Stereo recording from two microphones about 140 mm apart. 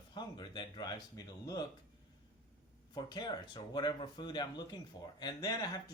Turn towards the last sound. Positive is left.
turn(degrees=25)  # may be behind; listen again after turning